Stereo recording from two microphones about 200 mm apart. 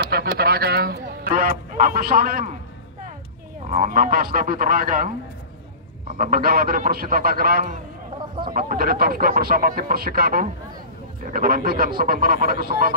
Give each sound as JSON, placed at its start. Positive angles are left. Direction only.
{"t": 0.0, "sound": "speech", "side_deg": -50}
{"t": 3.7, "sound": "speech", "side_deg": -45}
{"t": 6.1, "sound": "speech", "side_deg": -45}